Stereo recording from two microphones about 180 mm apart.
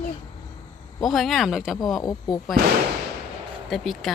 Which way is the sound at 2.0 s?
20° left (ahead or behind).